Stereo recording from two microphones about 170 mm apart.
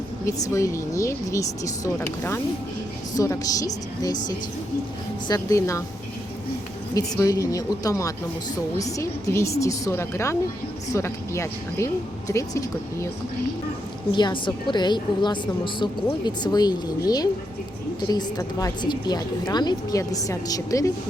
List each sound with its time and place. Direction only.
0.3 s a woman's voice: 20° left (ahead or behind)
5.3 s speech: 20° left (ahead or behind)
6.9 s a woman's voice: 20° left (ahead or behind)
14.1 s a woman's voice: 25° left (ahead or behind)